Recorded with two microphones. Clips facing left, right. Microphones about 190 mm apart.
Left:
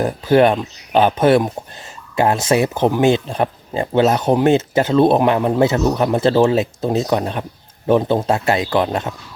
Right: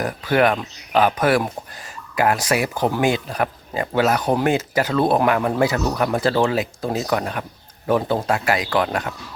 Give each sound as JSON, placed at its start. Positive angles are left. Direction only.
{"t": 0.0, "sound": "speech", "side_deg": 25}